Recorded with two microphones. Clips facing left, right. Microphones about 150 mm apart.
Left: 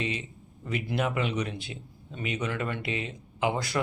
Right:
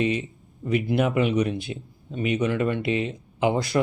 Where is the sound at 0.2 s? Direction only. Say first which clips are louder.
Right 8 dB; 15° right (ahead or behind).